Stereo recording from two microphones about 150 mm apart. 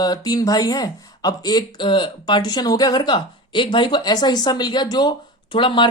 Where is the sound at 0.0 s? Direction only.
25° left (ahead or behind).